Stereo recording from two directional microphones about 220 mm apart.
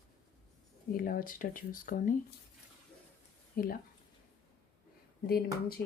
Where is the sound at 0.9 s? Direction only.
40° left (ahead or behind).